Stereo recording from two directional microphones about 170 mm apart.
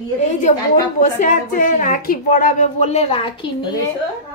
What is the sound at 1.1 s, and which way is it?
Speech, 50° left (ahead or behind).